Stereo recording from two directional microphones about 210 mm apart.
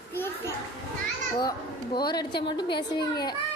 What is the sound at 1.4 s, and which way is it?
A woman's voice, 20° left (ahead or behind).